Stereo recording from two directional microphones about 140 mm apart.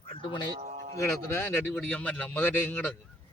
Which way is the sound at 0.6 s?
50° right (ahead or behind).